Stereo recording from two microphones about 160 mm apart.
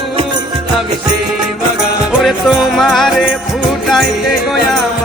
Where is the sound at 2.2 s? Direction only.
Centre (ahead or behind).